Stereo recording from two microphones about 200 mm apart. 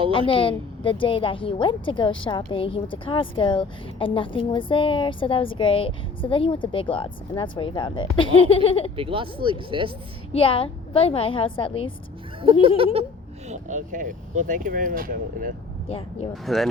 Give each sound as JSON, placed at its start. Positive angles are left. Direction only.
{"t": 0.1, "sound": "a woman's voice", "side_deg": 25}
{"t": 9.0, "sound": "speech", "side_deg": -25}
{"t": 10.3, "sound": "a woman's voice", "side_deg": 25}
{"t": 12.6, "sound": "speech", "side_deg": -30}
{"t": 15.9, "sound": "a woman's voice", "side_deg": 30}
{"t": 16.3, "sound": "speech", "side_deg": 0}